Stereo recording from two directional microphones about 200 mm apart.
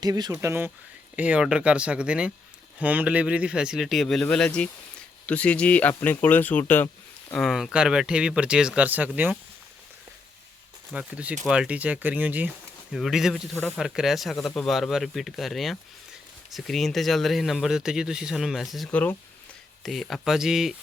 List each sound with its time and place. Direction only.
0.0 s speech: 20° right (ahead or behind); by 7.3 s 10° left (ahead or behind)
7.3 s speech: centre (ahead or behind)
10.9 s speech: 5° right (ahead or behind)